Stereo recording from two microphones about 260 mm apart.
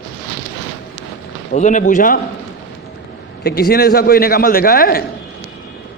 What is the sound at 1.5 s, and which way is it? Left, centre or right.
Speech, left.